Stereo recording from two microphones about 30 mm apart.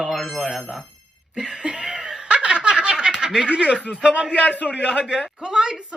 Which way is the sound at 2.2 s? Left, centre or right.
Right.